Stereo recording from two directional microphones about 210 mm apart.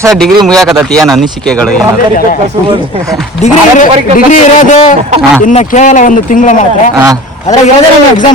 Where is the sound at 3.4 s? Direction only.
30° left (ahead or behind).